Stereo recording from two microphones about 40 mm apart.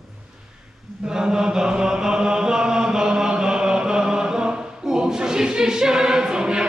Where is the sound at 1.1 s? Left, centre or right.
Centre.